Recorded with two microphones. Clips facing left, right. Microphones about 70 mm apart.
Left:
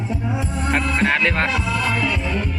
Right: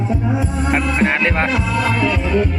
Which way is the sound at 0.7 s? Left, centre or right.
Centre.